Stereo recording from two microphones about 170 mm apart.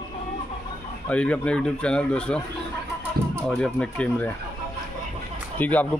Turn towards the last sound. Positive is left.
turn(degrees=10)  # may be behind; listen again after turning